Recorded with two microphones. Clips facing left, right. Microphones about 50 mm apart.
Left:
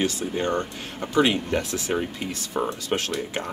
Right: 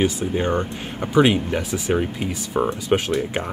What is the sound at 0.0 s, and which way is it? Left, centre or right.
Speech, centre.